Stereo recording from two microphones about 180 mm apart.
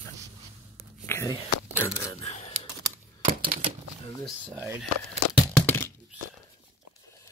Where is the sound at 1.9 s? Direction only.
15° left (ahead or behind).